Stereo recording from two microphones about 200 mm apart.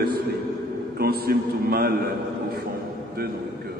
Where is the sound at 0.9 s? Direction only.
50° right (ahead or behind).